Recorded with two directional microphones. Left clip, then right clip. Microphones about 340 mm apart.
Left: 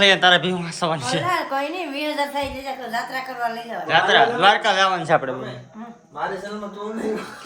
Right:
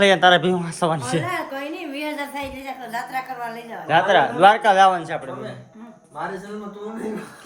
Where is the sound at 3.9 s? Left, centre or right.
Centre.